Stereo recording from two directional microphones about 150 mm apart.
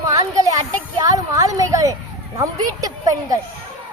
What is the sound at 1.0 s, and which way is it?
A woman's voice, 25° right (ahead or behind).